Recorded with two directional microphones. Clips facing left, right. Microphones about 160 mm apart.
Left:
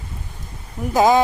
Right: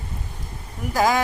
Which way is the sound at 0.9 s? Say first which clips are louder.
Left 5 dB; 20° left (ahead or behind).